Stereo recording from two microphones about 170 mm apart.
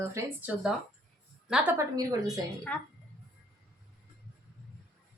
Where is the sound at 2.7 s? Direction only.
5° left (ahead or behind).